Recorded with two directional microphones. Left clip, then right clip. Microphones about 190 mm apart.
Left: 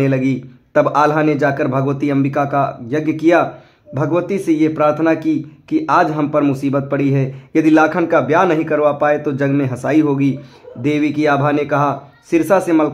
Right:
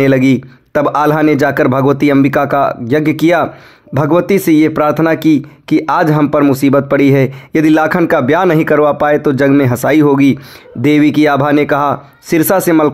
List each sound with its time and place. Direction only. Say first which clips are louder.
0.0 s speech: right 7 dB; 45° right (ahead or behind)